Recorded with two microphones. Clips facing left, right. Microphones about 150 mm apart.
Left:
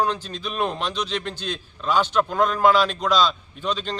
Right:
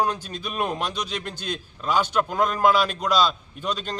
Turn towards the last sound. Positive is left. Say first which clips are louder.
# left 2 dB
turn(degrees=-10)  # may be behind; listen again after turning